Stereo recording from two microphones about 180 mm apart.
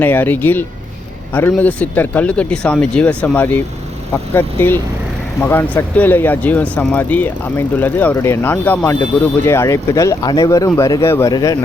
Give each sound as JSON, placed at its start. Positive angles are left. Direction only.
{"t": 0.0, "sound": "speech", "side_deg": 10}